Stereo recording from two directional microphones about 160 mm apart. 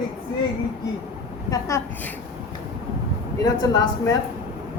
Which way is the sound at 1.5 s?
20° left (ahead or behind).